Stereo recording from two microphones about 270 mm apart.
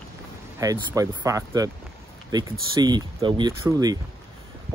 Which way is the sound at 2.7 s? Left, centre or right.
Centre.